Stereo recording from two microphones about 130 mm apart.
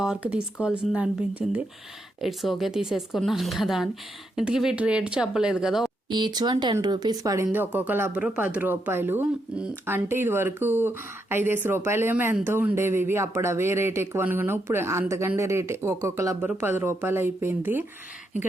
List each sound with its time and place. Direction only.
0.0 s speech: 10° right (ahead or behind)
6.1 s speech: 35° right (ahead or behind)
7.4 s speech: 15° right (ahead or behind)